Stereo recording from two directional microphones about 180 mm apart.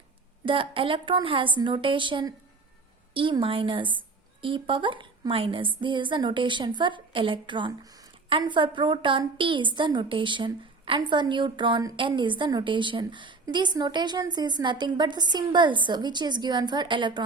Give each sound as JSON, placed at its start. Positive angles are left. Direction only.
{"t": 0.4, "sound": "a woman's voice", "side_deg": -30}